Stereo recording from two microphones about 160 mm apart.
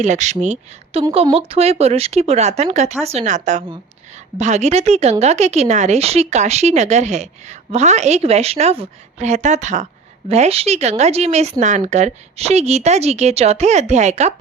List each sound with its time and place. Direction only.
0.0 s speech: 45° right (ahead or behind)